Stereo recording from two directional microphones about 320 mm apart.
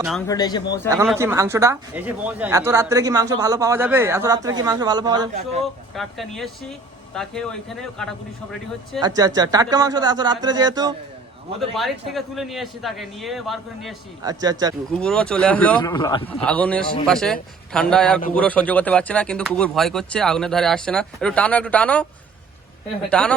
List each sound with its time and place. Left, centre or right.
0.3 s speech: centre
1.0 s speech: centre
5.9 s speech: centre
9.0 s speech: centre
11.7 s speech: centre
14.6 s speech: centre
14.9 s speech: centre
23.0 s speech: centre